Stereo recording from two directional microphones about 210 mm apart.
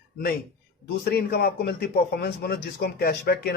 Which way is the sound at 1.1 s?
45° left (ahead or behind).